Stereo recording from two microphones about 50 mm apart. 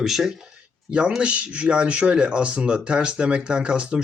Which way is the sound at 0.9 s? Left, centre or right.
Right.